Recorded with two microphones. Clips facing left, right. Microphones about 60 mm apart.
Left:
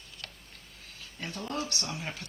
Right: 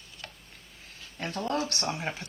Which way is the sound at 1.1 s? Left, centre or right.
Right.